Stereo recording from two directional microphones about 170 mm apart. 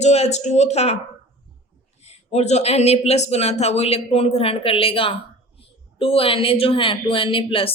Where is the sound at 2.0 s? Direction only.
40° left (ahead or behind).